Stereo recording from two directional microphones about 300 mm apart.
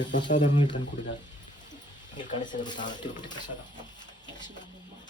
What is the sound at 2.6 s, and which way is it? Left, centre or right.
Speech, centre.